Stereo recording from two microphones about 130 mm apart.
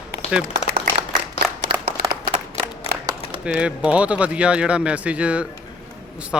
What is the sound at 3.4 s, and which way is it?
Speech, 10° right (ahead or behind).